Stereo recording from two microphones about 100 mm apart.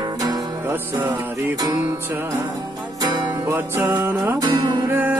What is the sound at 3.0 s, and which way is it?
Music, 40° right (ahead or behind).